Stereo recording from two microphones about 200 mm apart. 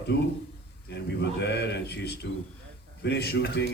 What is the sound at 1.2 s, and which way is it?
Speech, 60° left (ahead or behind).